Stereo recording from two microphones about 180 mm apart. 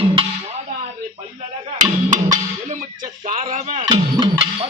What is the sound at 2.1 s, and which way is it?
Music, 45° right (ahead or behind).